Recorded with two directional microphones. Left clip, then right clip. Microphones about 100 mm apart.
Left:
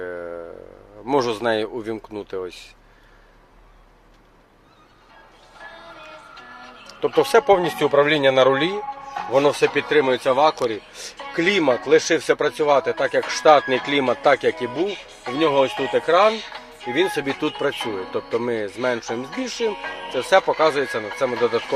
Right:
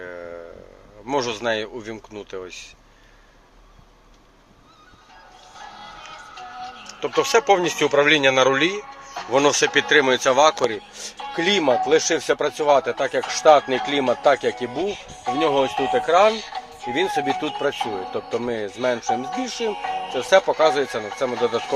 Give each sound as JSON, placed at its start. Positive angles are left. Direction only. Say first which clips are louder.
{"t": 0.0, "sound": "a sound", "louder": "left 4 dB", "side_deg": 55}
{"t": 1.0, "sound": "speech", "louder": "left 3 dB", "side_deg": 75}
{"t": 7.2, "sound": "speech", "louder": "left 2 dB", "side_deg": 55}
{"t": 7.4, "sound": "speech", "louder": "left 1 dB", "side_deg": 30}
{"t": 9.3, "sound": "speech", "louder": "even", "side_deg": 0}